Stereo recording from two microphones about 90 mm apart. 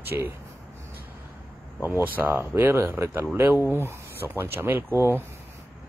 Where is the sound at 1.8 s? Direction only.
20° right (ahead or behind).